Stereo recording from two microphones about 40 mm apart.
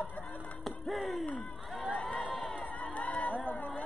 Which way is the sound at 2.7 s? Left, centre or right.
Left.